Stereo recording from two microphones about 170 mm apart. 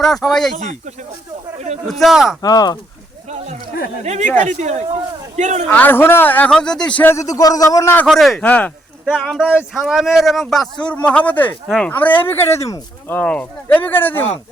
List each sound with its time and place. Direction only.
0.3 s speech: centre (ahead or behind)
0.5 s speech: 45° right (ahead or behind)
1.9 s speech: centre (ahead or behind)
2.4 s speech: 25° left (ahead or behind)
3.2 s speech: 40° right (ahead or behind)
5.7 s a man's voice: 10° left (ahead or behind)
8.0 s speech: centre (ahead or behind)
9.0 s a man's voice: centre (ahead or behind); by 13.1 s 20° left (ahead or behind)
13.1 s a man's voice: 5° left (ahead or behind)